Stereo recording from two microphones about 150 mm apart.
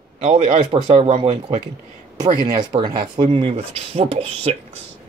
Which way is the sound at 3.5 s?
40° right (ahead or behind).